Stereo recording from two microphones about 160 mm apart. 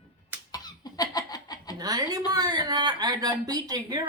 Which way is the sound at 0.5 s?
25° left (ahead or behind).